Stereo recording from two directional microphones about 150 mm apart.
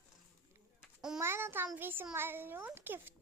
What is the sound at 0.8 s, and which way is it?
Babbling, 5° right (ahead or behind).